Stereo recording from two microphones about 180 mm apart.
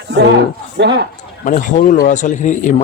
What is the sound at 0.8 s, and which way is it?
Speech, 70° right (ahead or behind).